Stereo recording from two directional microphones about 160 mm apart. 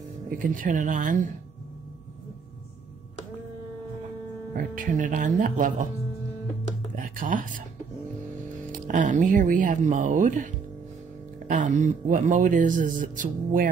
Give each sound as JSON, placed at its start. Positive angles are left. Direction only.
{"t": 0.3, "sound": "speech", "side_deg": -60}
{"t": 4.6, "sound": "speech", "side_deg": -55}
{"t": 7.0, "sound": "speech", "side_deg": -60}
{"t": 8.8, "sound": "speech", "side_deg": -55}